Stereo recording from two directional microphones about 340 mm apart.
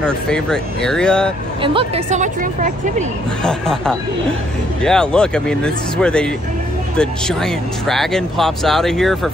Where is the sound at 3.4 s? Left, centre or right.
Centre.